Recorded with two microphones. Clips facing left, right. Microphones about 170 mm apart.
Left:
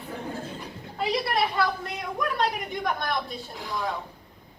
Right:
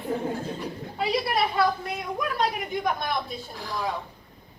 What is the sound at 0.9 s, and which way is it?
A woman's voice, centre (ahead or behind).